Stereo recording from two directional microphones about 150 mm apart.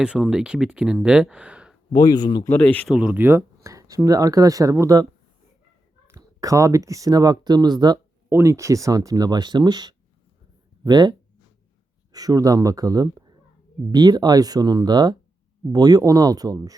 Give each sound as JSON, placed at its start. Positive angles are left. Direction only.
{"t": 0.0, "sound": "speech", "side_deg": -5}
{"t": 1.9, "sound": "speech", "side_deg": 25}
{"t": 2.5, "sound": "speech", "side_deg": 10}
{"t": 2.9, "sound": "speech", "side_deg": -5}
{"t": 6.1, "sound": "speech", "side_deg": -20}
{"t": 8.3, "sound": "speech", "side_deg": -15}
{"t": 12.1, "sound": "speech", "side_deg": -25}